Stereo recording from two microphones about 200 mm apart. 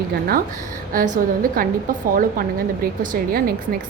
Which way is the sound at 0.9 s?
45° right (ahead or behind).